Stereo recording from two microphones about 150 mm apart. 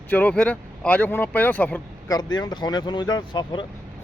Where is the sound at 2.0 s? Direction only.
25° left (ahead or behind).